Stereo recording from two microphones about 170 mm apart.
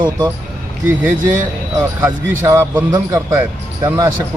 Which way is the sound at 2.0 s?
20° right (ahead or behind).